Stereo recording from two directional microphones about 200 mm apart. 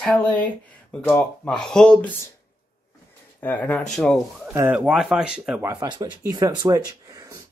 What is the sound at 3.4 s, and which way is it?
Speech, 5° left (ahead or behind).